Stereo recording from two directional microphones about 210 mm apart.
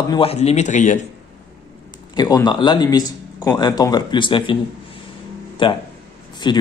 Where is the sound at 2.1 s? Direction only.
20° left (ahead or behind).